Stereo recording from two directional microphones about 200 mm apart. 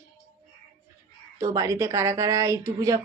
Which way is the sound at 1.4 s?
15° right (ahead or behind).